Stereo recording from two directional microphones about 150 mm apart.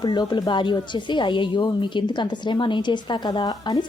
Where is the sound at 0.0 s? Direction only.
30° left (ahead or behind).